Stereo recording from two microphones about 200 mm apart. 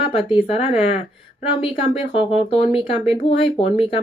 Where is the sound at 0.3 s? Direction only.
30° left (ahead or behind).